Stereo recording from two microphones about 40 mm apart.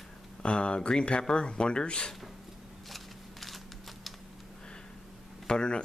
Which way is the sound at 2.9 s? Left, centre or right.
Centre.